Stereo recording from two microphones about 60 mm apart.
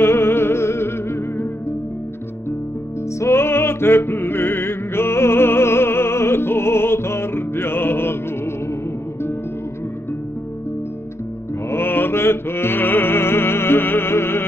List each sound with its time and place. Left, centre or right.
0.0 s music: left
3.2 s music: left
11.7 s music: left